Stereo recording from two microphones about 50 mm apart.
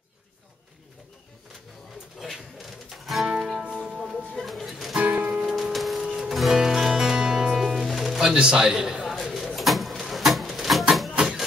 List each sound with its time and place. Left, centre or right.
2.3 s music: centre
3.9 s music: centre
4.9 s music: right
5.4 s music: centre
5.7 s printer: centre
6.0 s music: centre
9.0 s a sound: centre